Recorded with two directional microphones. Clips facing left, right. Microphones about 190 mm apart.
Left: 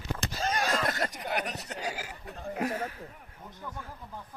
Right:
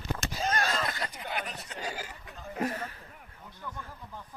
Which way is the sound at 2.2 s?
35° left (ahead or behind).